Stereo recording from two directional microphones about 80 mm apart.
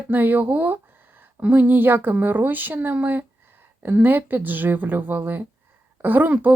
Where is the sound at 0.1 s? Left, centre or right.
Right.